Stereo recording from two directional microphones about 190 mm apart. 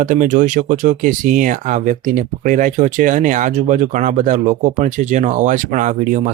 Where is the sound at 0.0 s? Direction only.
45° right (ahead or behind).